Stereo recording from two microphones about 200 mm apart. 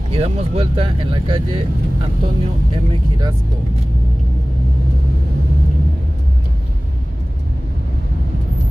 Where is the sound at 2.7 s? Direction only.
20° right (ahead or behind).